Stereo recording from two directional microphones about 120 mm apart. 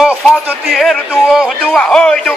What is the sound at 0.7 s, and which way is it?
Speech, centre (ahead or behind).